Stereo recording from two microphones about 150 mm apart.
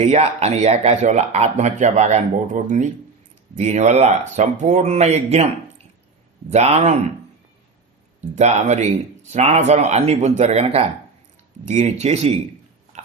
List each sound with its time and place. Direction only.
0.0 s speech: 45° right (ahead or behind)
6.5 s speech: 45° right (ahead or behind)
8.2 s speech: 50° right (ahead or behind)